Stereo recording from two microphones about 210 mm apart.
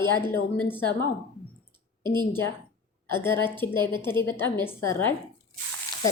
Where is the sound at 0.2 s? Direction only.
10° left (ahead or behind).